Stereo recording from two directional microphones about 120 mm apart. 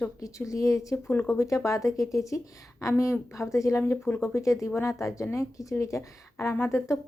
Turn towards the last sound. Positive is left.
turn(degrees=20)  # may be behind; listen again after turning